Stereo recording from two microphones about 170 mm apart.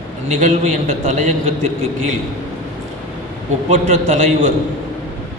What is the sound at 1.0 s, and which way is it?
Speech, 45° right (ahead or behind).